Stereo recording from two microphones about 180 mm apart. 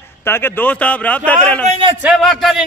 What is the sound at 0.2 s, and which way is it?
A man's voice, 10° left (ahead or behind).